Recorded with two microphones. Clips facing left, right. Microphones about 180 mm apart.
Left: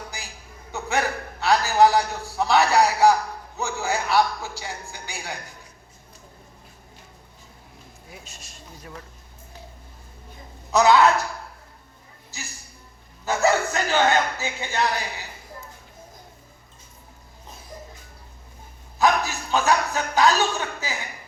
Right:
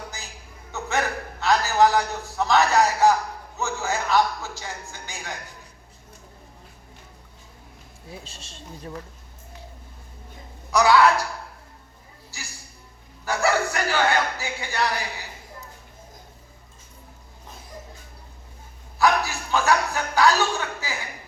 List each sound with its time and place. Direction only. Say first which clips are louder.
0.7 s a man's voice: left 1 dB; 15° left (ahead or behind)
8.1 s speech: right 5 dB; 30° right (ahead or behind)
10.7 s a man's voice: left 1 dB; 20° left (ahead or behind)
13.2 s a man's voice: left 2 dB; 20° left (ahead or behind)
18.9 s a man's voice: even; 20° left (ahead or behind)